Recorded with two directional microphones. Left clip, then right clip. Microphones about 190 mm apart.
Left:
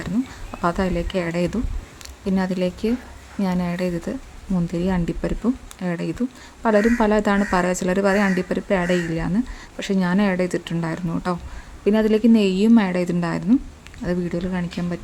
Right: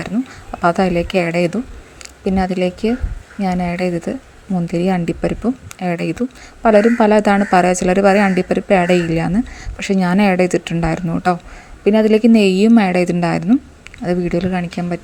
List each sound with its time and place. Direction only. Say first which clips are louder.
0.5 s speech: right 8 dB; 20° right (ahead or behind)